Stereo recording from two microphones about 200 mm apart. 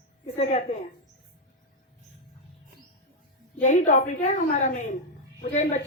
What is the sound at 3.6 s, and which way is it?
A woman's voice, 40° left (ahead or behind).